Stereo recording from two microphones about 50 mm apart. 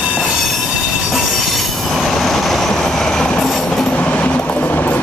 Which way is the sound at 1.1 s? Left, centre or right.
Centre.